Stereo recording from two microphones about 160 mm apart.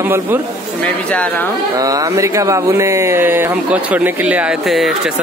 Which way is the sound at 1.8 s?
20° right (ahead or behind).